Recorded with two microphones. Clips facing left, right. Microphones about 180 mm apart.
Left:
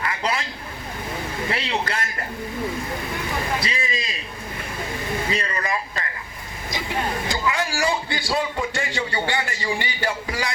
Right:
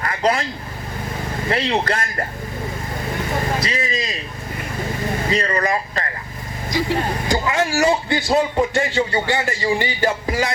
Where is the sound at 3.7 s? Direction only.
45° right (ahead or behind).